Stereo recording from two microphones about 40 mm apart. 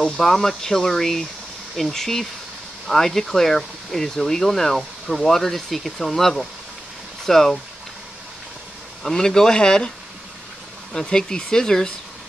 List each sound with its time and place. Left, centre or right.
0.0 s speech: centre
9.0 s speech: centre